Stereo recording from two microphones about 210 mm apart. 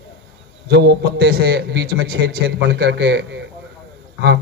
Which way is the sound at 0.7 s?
55° right (ahead or behind).